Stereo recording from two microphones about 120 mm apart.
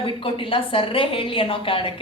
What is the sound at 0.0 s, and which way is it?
A woman's voice, 45° left (ahead or behind).